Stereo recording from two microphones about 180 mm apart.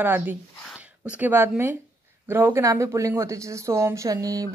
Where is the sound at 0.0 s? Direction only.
10° right (ahead or behind).